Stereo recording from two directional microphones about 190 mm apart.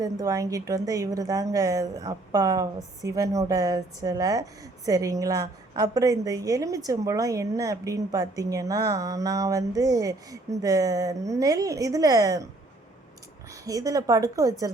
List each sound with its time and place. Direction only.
0.0 s a woman's voice: 20° right (ahead or behind)
13.5 s a woman's voice: 20° right (ahead or behind)